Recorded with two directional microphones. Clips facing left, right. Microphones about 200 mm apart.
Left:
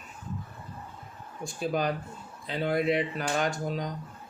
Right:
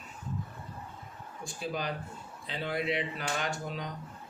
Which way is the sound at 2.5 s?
45° left (ahead or behind).